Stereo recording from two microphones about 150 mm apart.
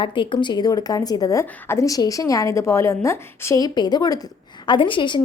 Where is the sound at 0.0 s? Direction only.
35° left (ahead or behind).